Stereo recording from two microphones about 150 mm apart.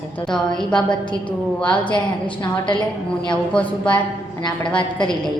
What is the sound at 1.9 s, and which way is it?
Speech, 30° left (ahead or behind).